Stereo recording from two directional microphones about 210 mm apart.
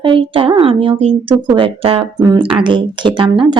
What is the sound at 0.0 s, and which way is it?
Speech, 25° right (ahead or behind).